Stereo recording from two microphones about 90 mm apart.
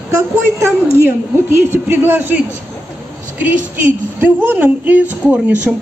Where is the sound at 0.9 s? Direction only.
25° right (ahead or behind).